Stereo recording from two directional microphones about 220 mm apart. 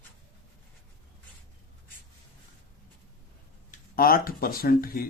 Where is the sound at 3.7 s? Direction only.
40° left (ahead or behind).